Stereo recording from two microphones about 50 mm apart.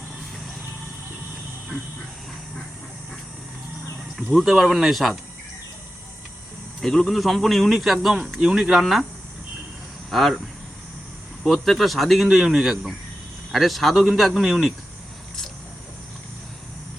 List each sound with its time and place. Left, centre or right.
4.3 s speech: centre
7.0 s speech: centre
8.7 s speech: centre
10.1 s speech: centre
11.5 s speech: centre